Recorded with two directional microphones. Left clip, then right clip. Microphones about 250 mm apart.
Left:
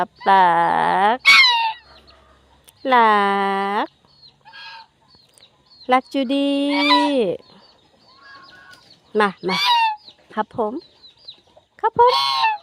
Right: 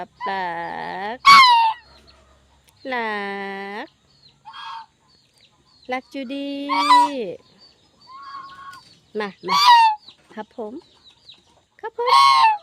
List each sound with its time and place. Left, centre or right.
0.3 s speech: left
1.2 s a sound: centre
2.8 s speech: left
5.8 s speech: centre
9.1 s speech: centre
9.5 s fowl: centre
10.3 s speech: centre
11.8 s goose: centre
12.0 s goose: right